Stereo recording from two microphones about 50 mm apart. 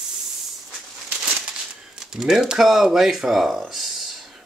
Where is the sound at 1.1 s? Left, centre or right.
Right.